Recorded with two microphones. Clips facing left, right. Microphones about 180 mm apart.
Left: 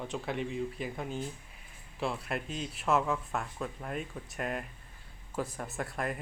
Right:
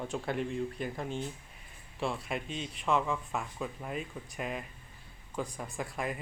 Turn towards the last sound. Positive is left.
turn(degrees=0)  # may be behind; listen again after turning